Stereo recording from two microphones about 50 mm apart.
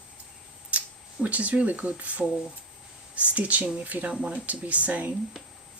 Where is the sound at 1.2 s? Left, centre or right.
Right.